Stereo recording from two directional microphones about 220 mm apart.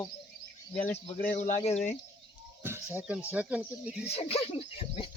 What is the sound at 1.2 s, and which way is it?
Speech, 35° left (ahead or behind).